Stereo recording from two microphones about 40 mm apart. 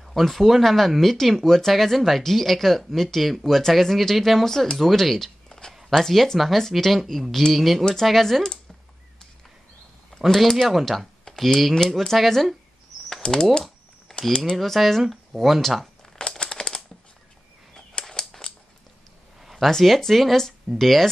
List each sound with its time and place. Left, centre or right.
0.0 s speech: centre
10.1 s speech: centre
13.2 s speech: centre
14.1 s typing: centre
14.6 s speech: centre
16.2 s a sound: centre
18.0 s a sound: centre
19.4 s a sound: centre
19.7 s speech: centre